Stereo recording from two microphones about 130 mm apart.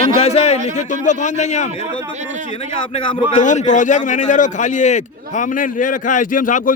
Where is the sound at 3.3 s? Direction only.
70° left (ahead or behind); by 6.7 s 90° left.